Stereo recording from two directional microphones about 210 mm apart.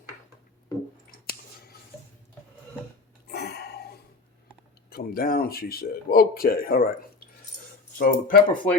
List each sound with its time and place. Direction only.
3.2 s a sound: 50° left (ahead or behind)
4.9 s speech: 45° left (ahead or behind)
7.9 s speech: 45° left (ahead or behind)